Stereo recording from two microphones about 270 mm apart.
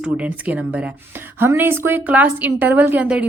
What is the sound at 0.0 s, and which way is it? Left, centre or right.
A woman's voice, centre.